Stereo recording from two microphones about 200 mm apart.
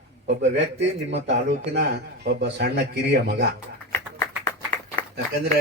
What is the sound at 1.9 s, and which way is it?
A man's voice, 55° right (ahead or behind).